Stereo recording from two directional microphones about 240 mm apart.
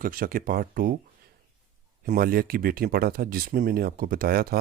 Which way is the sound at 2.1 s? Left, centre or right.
Right.